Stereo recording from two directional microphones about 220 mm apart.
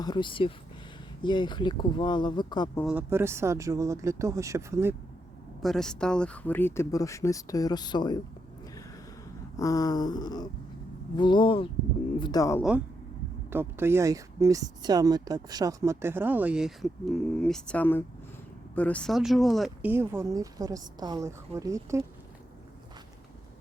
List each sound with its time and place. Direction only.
0.0 s speech: 20° left (ahead or behind)
2.8 s speech: 10° right (ahead or behind)
5.6 s speech: centre (ahead or behind); by 8.2 s 20° left (ahead or behind)
9.6 s speech: 15° left (ahead or behind)
13.5 s speech: 10° right (ahead or behind)